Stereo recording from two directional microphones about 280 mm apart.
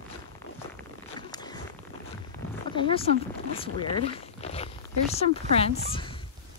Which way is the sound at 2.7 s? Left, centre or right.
Centre.